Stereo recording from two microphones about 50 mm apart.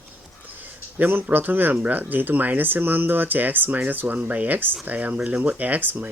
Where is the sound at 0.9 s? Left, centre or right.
Right.